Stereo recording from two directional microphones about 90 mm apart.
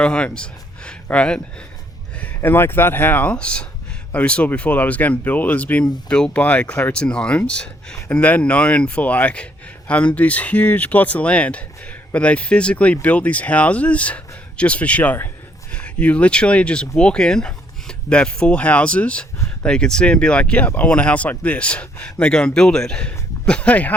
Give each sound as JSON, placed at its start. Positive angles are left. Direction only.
{"t": 0.0, "sound": "speech", "side_deg": 10}